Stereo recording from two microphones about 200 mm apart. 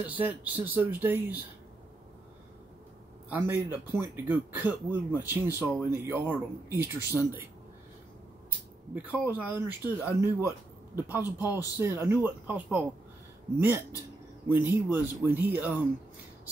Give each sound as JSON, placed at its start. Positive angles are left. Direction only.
{"t": 0.0, "sound": "speech", "side_deg": -10}
{"t": 3.3, "sound": "speech", "side_deg": -10}
{"t": 8.9, "sound": "speech", "side_deg": -5}
{"t": 11.2, "sound": "speech", "side_deg": 20}
{"t": 11.5, "sound": "speech", "side_deg": -10}
{"t": 14.5, "sound": "speech", "side_deg": -10}